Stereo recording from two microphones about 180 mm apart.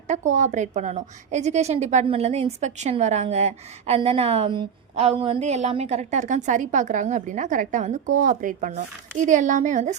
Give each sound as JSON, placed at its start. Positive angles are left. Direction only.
{"t": 0.1, "sound": "a woman's voice", "side_deg": -40}